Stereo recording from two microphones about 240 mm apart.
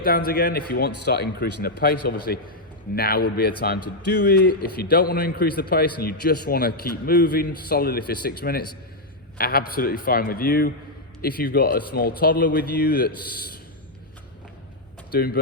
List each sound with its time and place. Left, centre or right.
0.0 s a man's voice: left
15.1 s speech: left